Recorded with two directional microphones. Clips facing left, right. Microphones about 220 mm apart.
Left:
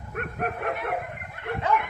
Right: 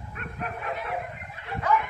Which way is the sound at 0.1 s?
55° left (ahead or behind).